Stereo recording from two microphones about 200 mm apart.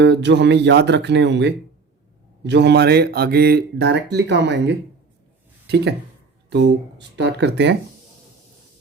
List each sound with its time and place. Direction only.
0.0 s speech: 60° right (ahead or behind)
7.2 s speech: 55° right (ahead or behind)